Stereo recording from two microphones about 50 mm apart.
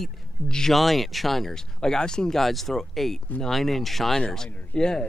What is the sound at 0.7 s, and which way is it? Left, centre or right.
Speech, centre.